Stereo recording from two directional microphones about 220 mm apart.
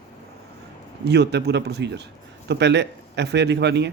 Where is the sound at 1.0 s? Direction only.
50° right (ahead or behind).